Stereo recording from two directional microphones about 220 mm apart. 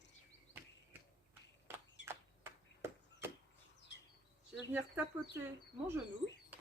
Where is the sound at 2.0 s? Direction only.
50° left (ahead or behind).